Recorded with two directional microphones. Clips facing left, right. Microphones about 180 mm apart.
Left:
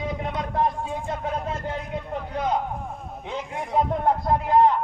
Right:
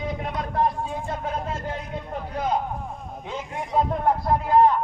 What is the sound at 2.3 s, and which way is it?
Speech, 20° left (ahead or behind).